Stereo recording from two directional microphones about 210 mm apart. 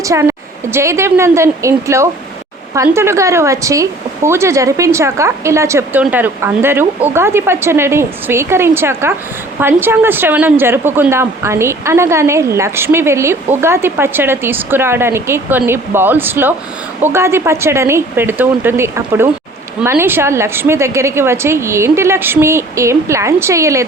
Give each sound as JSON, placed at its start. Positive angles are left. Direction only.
{"t": 0.0, "sound": "a woman's voice", "side_deg": -15}